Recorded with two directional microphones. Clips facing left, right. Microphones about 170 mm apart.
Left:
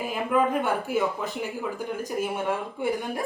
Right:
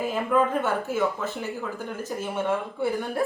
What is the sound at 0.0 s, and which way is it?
Speech, 15° left (ahead or behind).